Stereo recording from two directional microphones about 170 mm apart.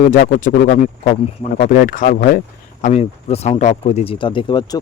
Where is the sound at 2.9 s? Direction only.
40° left (ahead or behind).